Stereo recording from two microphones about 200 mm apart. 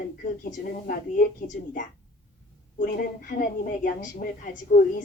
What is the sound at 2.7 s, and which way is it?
A woman's voice, 45° left (ahead or behind).